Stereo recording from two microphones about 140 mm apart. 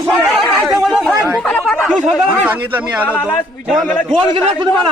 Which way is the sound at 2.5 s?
10° right (ahead or behind).